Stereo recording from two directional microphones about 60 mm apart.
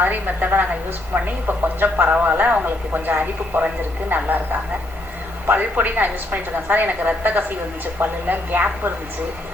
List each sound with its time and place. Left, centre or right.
0.0 s a woman's voice: right
5.5 s a woman's voice: right